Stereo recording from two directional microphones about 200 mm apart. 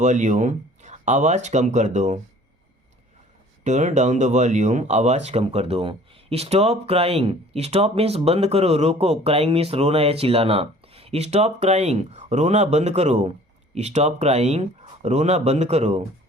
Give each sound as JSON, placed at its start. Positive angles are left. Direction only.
{"t": 0.0, "sound": "speech", "side_deg": -40}
{"t": 3.6, "sound": "speech", "side_deg": -35}